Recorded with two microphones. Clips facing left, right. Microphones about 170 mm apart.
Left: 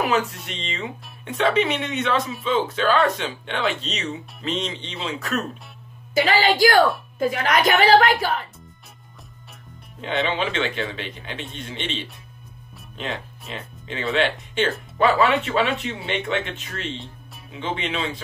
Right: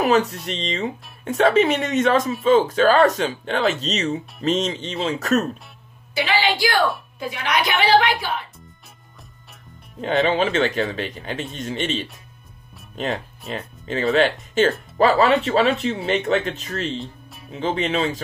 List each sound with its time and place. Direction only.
0.0 s speech: 40° right (ahead or behind)
6.1 s a woman's voice: 45° left (ahead or behind)
10.2 s speech: 45° right (ahead or behind)